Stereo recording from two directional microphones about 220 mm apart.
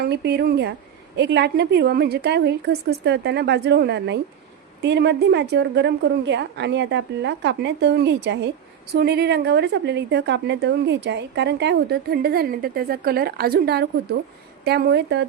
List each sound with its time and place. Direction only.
0.0 s a woman's voice: 50° right (ahead or behind)